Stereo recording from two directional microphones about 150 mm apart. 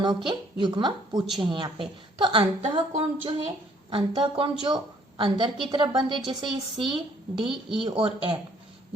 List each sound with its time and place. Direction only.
0.0 s speech: 30° right (ahead or behind)